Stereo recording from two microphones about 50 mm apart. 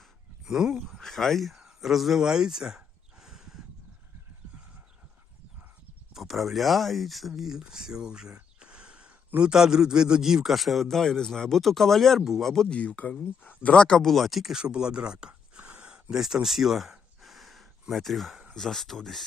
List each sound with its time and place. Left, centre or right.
0.4 s speech: centre
0.9 s a sound: centre
6.1 s a man's voice: centre
12.7 s speech: left
13.7 s speech: centre
14.1 s a man's voice: centre
14.6 s a sound: centre
16.1 s a sound: centre
18.5 s a man's voice: centre